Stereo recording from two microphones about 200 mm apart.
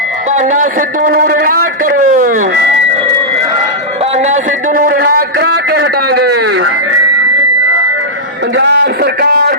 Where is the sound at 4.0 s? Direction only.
35° right (ahead or behind); by 6.6 s 55° right (ahead or behind).